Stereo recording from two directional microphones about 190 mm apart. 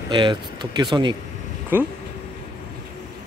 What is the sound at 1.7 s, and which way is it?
Speech, 10° right (ahead or behind).